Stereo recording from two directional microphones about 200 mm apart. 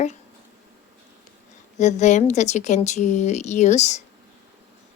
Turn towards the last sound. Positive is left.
turn(degrees=35)  # may be behind; listen again after turning